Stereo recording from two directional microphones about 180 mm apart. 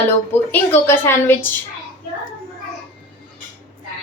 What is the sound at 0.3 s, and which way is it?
A woman's voice, 10° left (ahead or behind).